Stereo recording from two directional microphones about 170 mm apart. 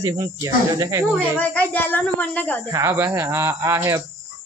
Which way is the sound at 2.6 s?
15° right (ahead or behind).